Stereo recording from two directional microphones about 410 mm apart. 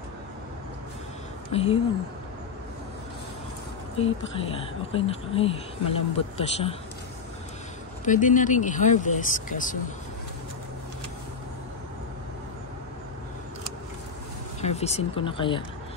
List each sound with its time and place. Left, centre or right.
1.5 s speech: centre
4.0 s speech: centre
8.0 s speech: centre
14.6 s speech: centre